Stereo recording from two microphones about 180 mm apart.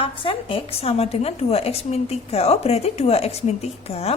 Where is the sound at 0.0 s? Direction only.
30° left (ahead or behind).